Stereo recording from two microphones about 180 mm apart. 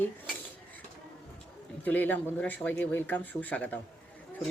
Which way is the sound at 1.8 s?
10° left (ahead or behind).